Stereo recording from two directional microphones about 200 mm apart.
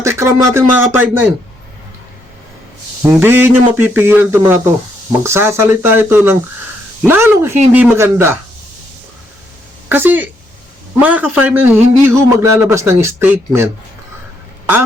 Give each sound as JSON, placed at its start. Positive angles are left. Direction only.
{"t": 0.0, "sound": "a man's voice", "side_deg": -15}
{"t": 3.0, "sound": "a man's voice", "side_deg": -10}
{"t": 9.9, "sound": "a man's voice", "side_deg": -10}